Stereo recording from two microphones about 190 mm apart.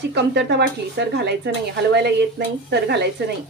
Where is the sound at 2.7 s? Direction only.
60° right (ahead or behind).